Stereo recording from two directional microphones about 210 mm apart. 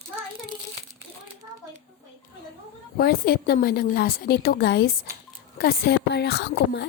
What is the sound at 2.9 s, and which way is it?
A woman's voice, 45° left (ahead or behind).